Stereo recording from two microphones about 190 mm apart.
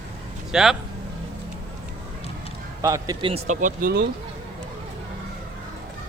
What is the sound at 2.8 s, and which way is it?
Speech, 15° right (ahead or behind).